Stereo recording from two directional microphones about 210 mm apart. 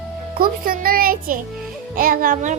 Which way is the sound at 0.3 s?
45° right (ahead or behind).